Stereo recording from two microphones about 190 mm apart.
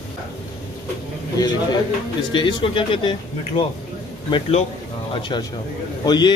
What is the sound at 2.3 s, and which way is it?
A man's voice, 25° left (ahead or behind).